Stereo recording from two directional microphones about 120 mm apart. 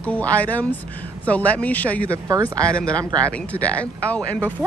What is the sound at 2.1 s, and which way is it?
Speech, 25° right (ahead or behind).